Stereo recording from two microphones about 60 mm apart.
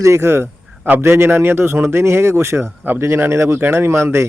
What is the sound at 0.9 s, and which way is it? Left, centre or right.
A man's voice, right.